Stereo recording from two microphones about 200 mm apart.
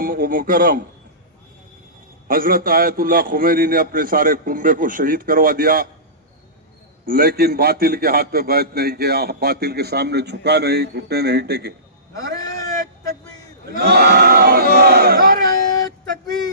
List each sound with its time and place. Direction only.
0.0 s a man's voice: 45° right (ahead or behind)
2.2 s a man's voice: 45° right (ahead or behind)
7.0 s a man's voice: 45° right (ahead or behind)
13.7 s a sound: 50° right (ahead or behind)